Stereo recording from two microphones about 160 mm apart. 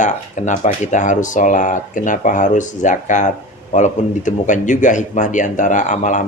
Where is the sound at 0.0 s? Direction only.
50° left (ahead or behind).